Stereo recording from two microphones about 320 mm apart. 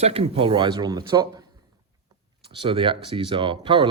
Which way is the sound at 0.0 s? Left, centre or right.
Centre.